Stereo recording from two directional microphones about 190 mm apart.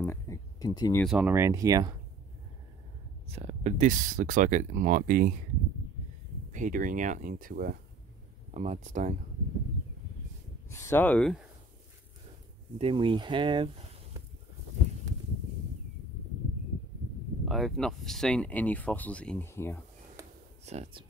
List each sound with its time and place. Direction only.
0.0 s a sound: 15° left (ahead or behind)
1.0 s speech: 5° right (ahead or behind)
3.3 s speech: 35° right (ahead or behind)
6.5 s speech: 45° right (ahead or behind)
8.5 s speech: 40° right (ahead or behind)
10.7 s speech: 15° left (ahead or behind)
12.7 s speech: 30° right (ahead or behind)
17.5 s speech: centre (ahead or behind)
20.2 s a sound: 15° right (ahead or behind)
20.6 s speech: 35° right (ahead or behind)